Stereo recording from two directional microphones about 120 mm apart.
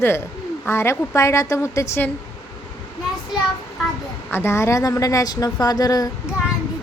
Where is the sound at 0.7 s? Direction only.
20° left (ahead or behind).